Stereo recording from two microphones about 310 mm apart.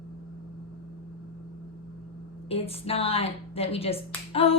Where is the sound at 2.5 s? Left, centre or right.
Centre.